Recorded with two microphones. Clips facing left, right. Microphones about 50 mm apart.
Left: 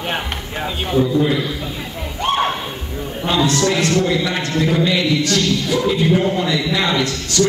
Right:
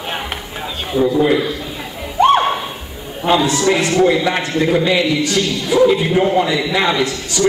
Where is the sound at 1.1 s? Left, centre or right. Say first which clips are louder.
Right 3 dB; centre.